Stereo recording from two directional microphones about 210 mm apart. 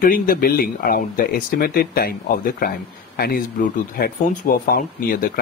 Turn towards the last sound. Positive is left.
turn(degrees=45)  # may be behind; listen again after turning